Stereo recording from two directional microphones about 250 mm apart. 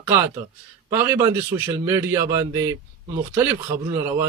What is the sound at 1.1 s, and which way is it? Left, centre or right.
Speech, centre.